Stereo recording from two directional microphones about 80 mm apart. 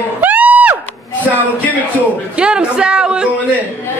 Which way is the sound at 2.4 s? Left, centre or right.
Centre.